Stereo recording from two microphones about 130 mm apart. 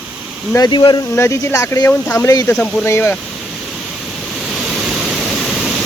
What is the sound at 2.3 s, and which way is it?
Speech, 25° left (ahead or behind).